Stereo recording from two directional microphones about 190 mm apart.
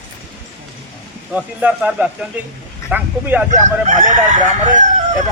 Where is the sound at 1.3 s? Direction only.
5° right (ahead or behind).